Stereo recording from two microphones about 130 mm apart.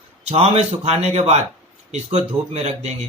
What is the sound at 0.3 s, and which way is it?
Speech, 55° right (ahead or behind).